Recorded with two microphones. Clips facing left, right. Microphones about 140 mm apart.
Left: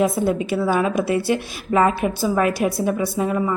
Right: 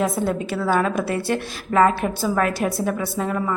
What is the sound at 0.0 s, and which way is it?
A woman's voice, 15° left (ahead or behind).